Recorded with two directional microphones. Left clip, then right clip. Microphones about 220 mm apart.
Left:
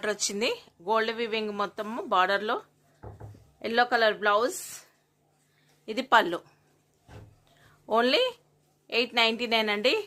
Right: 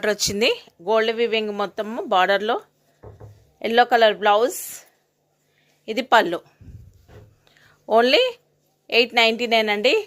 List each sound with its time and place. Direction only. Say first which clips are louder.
0.0 s speech: right 8 dB; 25° right (ahead or behind)
7.4 s a sound: right 8 dB; 30° right (ahead or behind)
8.9 s speech: right 8 dB; 25° right (ahead or behind)